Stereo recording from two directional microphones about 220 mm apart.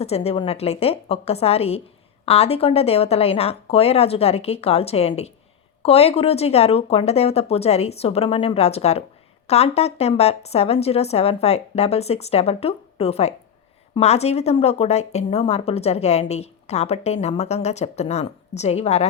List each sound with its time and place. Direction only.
0.0 s a woman's voice: 30° left (ahead or behind)